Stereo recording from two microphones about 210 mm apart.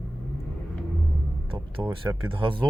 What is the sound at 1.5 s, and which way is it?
Speech, 20° right (ahead or behind).